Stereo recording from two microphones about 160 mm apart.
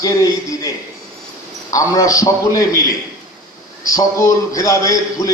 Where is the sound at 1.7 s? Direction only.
20° left (ahead or behind).